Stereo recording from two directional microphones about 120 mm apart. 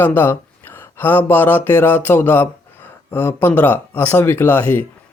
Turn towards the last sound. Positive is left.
turn(degrees=15)  # may be behind; listen again after turning